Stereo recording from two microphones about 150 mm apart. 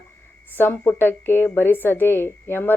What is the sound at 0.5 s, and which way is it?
Speech, 15° left (ahead or behind).